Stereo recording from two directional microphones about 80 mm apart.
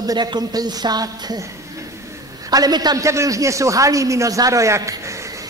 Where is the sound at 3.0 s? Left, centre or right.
Right.